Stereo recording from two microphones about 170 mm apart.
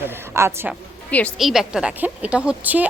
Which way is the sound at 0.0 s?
15° right (ahead or behind).